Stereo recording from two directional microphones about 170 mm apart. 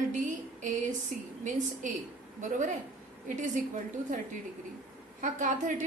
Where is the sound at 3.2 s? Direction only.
50° right (ahead or behind).